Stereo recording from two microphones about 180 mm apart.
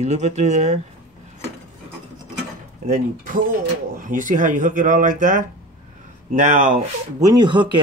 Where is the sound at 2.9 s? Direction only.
50° right (ahead or behind).